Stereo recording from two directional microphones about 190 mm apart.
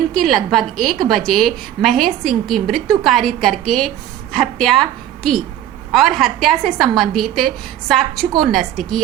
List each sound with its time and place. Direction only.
0.2 s a woman's voice: centre (ahead or behind)